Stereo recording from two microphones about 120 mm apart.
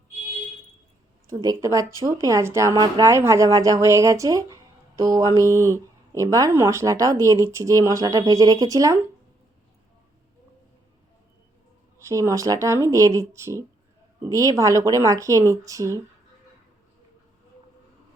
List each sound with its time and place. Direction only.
1.3 s speech: 30° right (ahead or behind)
11.9 s speech: 25° right (ahead or behind)